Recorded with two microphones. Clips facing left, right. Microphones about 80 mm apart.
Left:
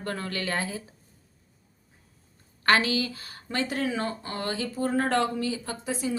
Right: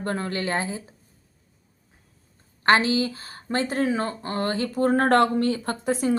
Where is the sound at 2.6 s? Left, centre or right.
Right.